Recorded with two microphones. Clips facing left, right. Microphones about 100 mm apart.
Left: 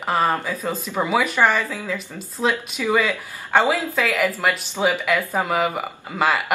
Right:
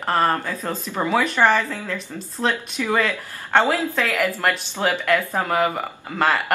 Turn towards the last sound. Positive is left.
turn(degrees=5)  # may be behind; listen again after turning